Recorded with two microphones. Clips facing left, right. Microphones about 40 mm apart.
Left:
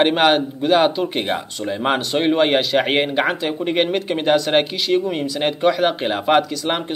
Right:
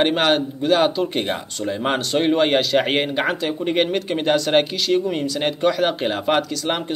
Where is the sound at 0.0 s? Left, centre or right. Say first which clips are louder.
Left 3 dB; centre.